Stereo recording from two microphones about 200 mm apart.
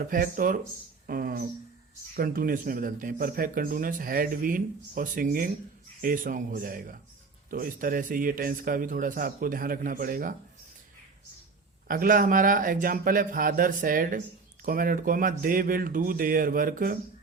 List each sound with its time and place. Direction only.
0.1 s speech: 45° right (ahead or behind)
11.9 s speech: 45° right (ahead or behind)